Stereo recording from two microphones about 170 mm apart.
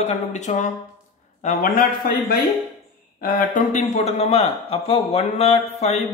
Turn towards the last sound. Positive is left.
turn(degrees=35)  # may be behind; listen again after turning